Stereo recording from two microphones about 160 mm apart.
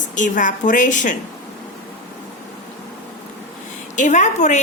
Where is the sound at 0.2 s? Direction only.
55° left (ahead or behind).